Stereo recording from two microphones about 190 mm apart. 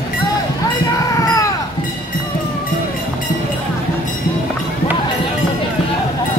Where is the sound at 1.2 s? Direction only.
20° left (ahead or behind).